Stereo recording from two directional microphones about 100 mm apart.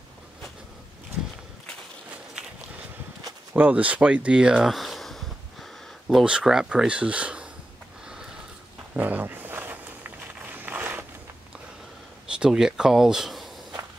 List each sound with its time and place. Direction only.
2.4 s walk: 5° right (ahead or behind)
3.5 s speech: 15° right (ahead or behind)
8.9 s a sound: 15° right (ahead or behind)
12.3 s speech: 5° right (ahead or behind)